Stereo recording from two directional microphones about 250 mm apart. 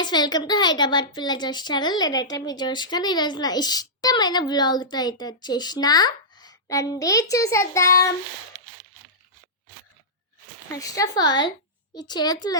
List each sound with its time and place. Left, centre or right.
0.0 s a woman's voice: centre
10.7 s a woman's voice: centre